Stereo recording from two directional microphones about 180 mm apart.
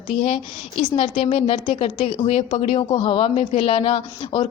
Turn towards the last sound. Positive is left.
turn(degrees=30)  # may be behind; listen again after turning